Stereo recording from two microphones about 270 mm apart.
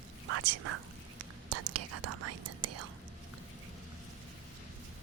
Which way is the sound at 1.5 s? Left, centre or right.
Right.